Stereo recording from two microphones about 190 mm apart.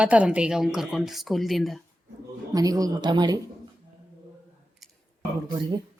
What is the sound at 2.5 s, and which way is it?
Speech, 20° right (ahead or behind).